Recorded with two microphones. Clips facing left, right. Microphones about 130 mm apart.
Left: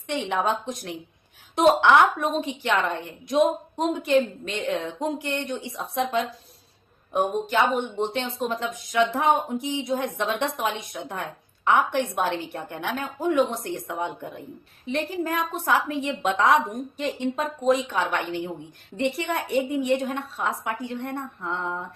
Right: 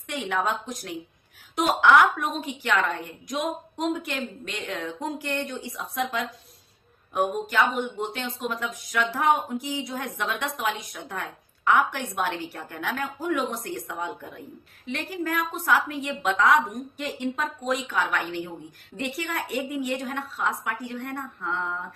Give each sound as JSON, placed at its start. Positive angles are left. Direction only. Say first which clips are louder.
{"t": 0.1, "sound": "a woman's voice", "louder": "left 2 dB", "side_deg": 25}